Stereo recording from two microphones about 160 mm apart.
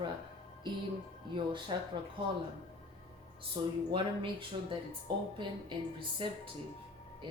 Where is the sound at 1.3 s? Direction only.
30° right (ahead or behind).